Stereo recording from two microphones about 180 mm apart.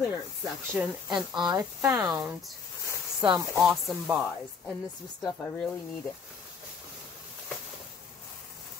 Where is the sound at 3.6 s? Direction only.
Centre (ahead or behind).